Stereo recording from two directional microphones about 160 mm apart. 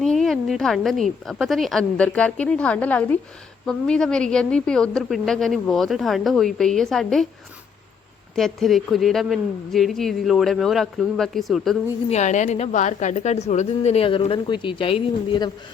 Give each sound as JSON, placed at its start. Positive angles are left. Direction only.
{"t": 0.0, "sound": "a woman's voice", "side_deg": 0}
{"t": 8.4, "sound": "a woman's voice", "side_deg": 0}
{"t": 12.0, "sound": "a woman's voice", "side_deg": 45}